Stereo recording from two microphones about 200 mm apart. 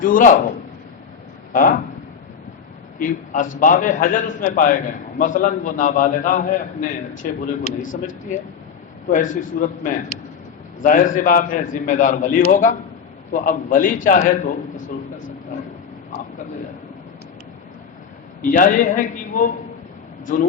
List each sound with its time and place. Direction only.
0.0 s a man's voice: 40° left (ahead or behind)
1.5 s a man's voice: 40° left (ahead or behind)
3.0 s a man's voice: 40° left (ahead or behind)
18.4 s a man's voice: 45° left (ahead or behind)